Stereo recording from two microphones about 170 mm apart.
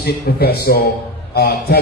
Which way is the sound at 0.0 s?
70° left (ahead or behind).